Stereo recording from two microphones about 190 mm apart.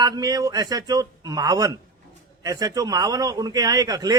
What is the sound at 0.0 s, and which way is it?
A man's voice, 20° right (ahead or behind).